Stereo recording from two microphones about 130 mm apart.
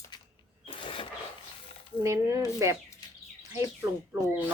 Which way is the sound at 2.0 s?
25° right (ahead or behind).